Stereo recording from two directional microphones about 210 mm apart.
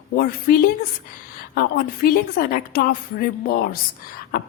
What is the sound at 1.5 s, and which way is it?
A woman's voice, 45° left (ahead or behind).